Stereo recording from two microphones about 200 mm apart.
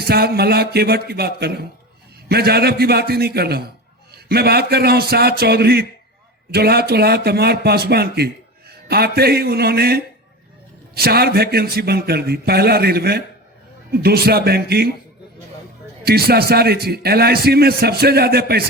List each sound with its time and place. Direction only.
0.0 s a man's voice: 50° right (ahead or behind)
16.0 s a man's voice: 50° right (ahead or behind)